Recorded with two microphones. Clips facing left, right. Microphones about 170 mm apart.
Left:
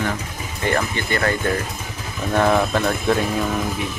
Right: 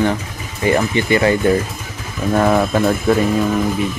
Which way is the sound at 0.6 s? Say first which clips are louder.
Right 6 dB; 15° right (ahead or behind).